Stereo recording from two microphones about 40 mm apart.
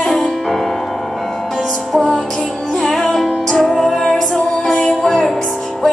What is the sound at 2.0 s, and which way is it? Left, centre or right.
Music, centre.